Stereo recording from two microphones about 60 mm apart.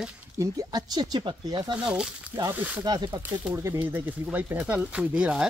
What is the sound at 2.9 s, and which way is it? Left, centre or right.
Speech, right.